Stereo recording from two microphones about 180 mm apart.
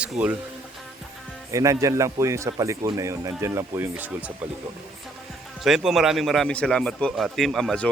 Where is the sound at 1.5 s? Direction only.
15° right (ahead or behind).